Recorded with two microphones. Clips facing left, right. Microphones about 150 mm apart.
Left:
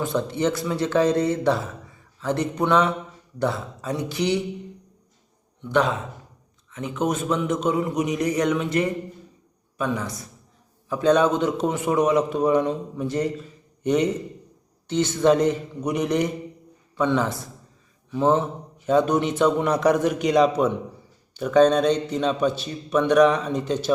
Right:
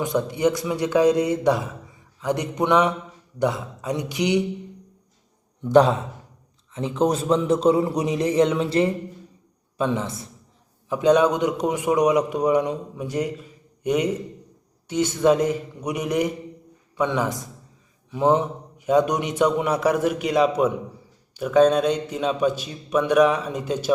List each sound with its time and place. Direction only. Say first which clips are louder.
0.0 s a man's voice: right 2 dB; 15° right (ahead or behind)
5.6 s a man's voice: right 6 dB; 35° right (ahead or behind); by 23.9 s 10° right (ahead or behind)